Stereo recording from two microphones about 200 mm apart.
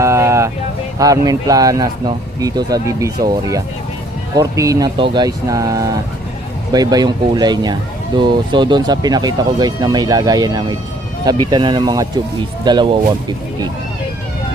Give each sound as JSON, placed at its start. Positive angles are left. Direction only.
{"t": 0.0, "sound": "vehicle", "side_deg": -15}
{"t": 0.9, "sound": "speech", "side_deg": -15}